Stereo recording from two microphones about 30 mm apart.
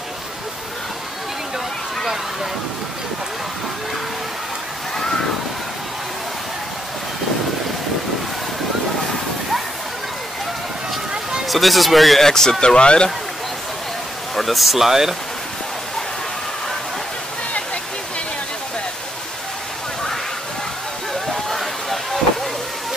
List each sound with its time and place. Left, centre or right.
11.4 s speech: centre
12.2 s speech: centre
12.6 s speech: left
14.3 s speech: centre
21.1 s a sound: centre